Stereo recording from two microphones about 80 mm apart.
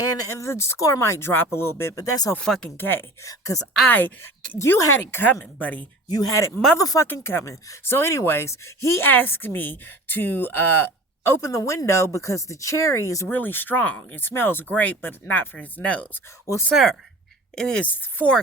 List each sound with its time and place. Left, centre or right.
0.2 s speech: left
2.0 s speech: left
2.4 s speech: centre
2.7 s speech: left
3.2 s speech: left
3.8 s speech: left
4.5 s speech: left
6.1 s speech: left
7.0 s speech: left
11.3 s speech: left
13.3 s speech: left
16.7 s speech: centre
17.5 s speech: centre
17.8 s speech: left